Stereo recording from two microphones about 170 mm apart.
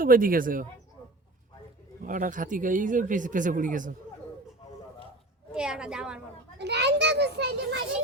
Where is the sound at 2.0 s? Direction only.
50° right (ahead or behind).